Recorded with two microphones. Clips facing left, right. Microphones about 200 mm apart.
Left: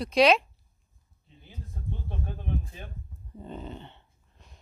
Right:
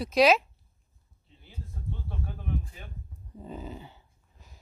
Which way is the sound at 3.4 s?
5° right (ahead or behind).